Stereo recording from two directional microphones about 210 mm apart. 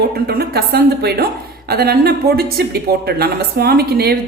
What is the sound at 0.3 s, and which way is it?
Speech, 50° right (ahead or behind).